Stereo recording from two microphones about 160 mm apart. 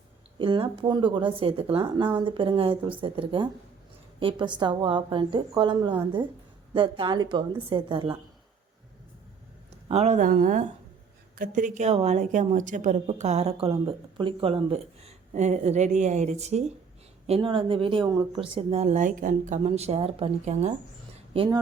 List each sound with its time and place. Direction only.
0.3 s a woman's voice: 30° right (ahead or behind)
9.9 s a woman's voice: 45° right (ahead or behind)
21.3 s a woman's voice: 30° right (ahead or behind)